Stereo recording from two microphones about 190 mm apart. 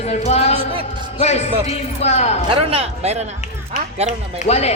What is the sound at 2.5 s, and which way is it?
Speech, 30° right (ahead or behind).